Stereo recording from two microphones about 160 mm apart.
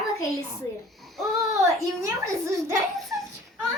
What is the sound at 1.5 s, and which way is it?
A child's voice, 20° right (ahead or behind).